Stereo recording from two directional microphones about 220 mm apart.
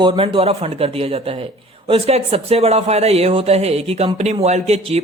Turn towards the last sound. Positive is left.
turn(degrees=-30)  # may be behind; listen again after turning